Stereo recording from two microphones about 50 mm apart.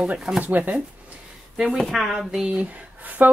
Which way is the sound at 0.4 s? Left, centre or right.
Right.